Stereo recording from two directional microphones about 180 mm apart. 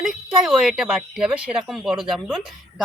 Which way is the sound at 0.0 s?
Centre (ahead or behind).